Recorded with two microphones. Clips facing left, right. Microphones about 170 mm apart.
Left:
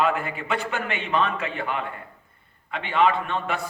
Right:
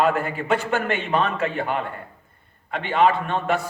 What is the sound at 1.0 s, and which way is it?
A man's voice, 40° right (ahead or behind).